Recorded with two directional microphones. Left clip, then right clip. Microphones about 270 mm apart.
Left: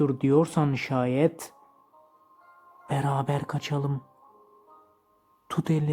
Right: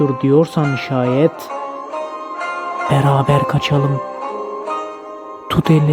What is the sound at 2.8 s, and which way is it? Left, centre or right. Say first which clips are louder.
Music: right 12 dB; right.